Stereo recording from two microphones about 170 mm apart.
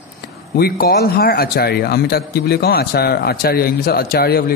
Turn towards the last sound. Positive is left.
turn(degrees=65)  # may be behind; listen again after turning